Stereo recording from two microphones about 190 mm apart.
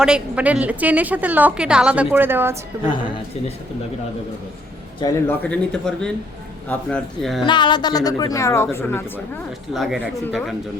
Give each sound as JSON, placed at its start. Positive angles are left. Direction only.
{"t": 0.0, "sound": "a woman's voice", "side_deg": -5}
{"t": 4.9, "sound": "speech", "side_deg": 15}
{"t": 7.4, "sound": "speech", "side_deg": 25}
{"t": 9.7, "sound": "speech", "side_deg": 0}